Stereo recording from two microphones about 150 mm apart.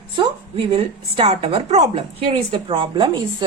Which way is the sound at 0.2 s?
40° right (ahead or behind).